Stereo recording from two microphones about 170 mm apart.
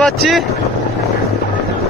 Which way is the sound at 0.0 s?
Centre (ahead or behind).